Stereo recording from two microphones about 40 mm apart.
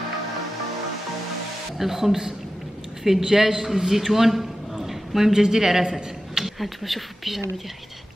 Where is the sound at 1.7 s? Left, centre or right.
Centre.